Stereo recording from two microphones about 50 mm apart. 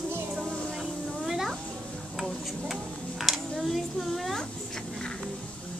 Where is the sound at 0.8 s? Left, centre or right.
Centre.